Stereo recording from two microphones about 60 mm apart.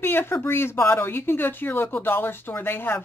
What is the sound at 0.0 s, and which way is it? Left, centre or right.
Speech, left.